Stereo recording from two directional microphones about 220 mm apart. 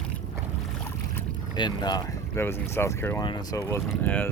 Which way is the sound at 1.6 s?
20° left (ahead or behind).